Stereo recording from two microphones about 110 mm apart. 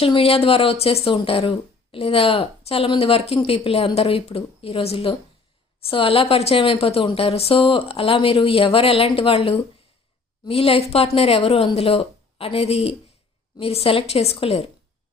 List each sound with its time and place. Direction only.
0.0 s speech: 60° left (ahead or behind)